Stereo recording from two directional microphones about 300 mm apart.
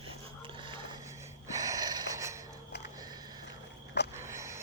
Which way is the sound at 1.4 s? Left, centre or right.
Centre.